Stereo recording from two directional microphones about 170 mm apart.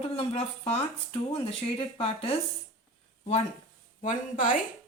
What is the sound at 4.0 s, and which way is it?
Speech, 50° left (ahead or behind).